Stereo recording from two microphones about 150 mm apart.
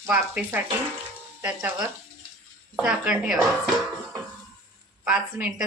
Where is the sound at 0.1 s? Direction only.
10° right (ahead or behind).